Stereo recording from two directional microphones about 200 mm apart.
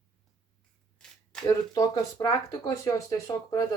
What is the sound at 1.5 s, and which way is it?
Speech, 15° left (ahead or behind).